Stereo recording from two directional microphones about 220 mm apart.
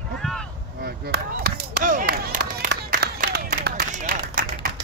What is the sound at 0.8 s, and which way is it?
Chop, 45° right (ahead or behind).